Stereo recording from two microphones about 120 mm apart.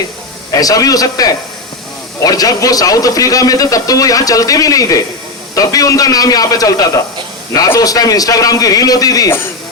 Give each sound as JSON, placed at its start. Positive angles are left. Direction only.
{"t": 0.5, "sound": "a man's voice", "side_deg": 30}